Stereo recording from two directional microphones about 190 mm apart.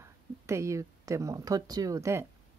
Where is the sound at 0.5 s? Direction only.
15° right (ahead or behind).